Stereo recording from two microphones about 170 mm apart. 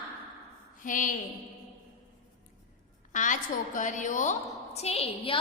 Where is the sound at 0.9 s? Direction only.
50° left (ahead or behind).